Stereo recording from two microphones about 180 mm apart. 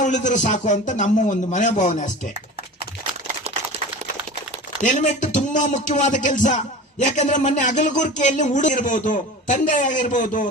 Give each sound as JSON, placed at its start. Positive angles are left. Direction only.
{"t": 0.0, "sound": "speech", "side_deg": 40}
{"t": 4.8, "sound": "speech", "side_deg": 45}